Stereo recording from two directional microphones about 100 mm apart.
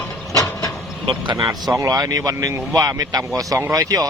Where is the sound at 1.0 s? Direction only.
50° right (ahead or behind).